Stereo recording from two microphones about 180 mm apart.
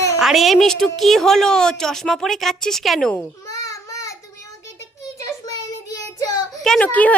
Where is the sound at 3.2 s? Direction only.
15° left (ahead or behind).